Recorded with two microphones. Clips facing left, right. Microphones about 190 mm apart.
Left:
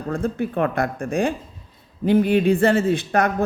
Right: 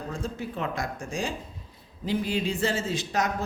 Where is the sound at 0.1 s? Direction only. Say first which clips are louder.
Left 13 dB; 55° left (ahead or behind).